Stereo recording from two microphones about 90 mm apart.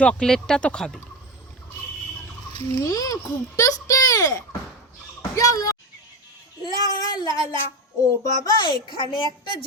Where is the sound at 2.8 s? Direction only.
40° left (ahead or behind).